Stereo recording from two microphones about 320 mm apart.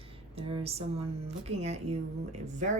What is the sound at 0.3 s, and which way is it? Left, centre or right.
Speech, centre.